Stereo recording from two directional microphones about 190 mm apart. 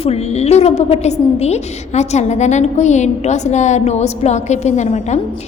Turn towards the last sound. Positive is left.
turn(degrees=35)  # may be behind; listen again after turning